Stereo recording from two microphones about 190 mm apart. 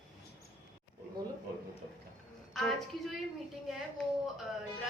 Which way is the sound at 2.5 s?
Centre (ahead or behind).